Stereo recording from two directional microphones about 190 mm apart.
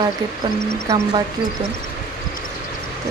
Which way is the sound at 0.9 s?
15° right (ahead or behind).